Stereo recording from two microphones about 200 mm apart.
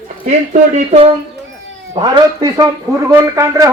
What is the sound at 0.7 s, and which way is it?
A man's voice, 30° right (ahead or behind).